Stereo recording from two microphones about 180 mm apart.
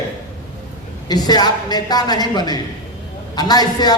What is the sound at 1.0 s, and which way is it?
Speech, 20° left (ahead or behind).